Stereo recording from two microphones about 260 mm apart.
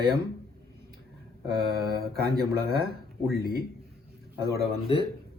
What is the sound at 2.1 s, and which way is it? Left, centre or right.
Speech, right.